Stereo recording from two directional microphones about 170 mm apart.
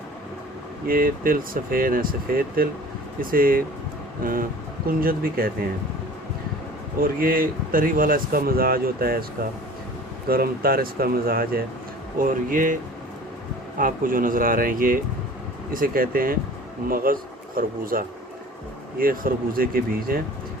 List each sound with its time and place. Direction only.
0.9 s speech: 55° right (ahead or behind)
7.0 s speech: 55° right (ahead or behind)